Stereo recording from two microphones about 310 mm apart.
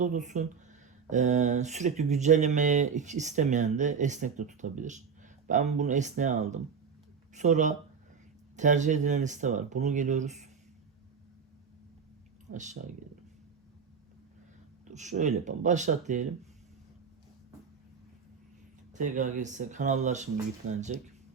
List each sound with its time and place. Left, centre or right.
0.0 s speech: right
12.5 s speech: right
14.8 s speech: right
18.9 s speech: right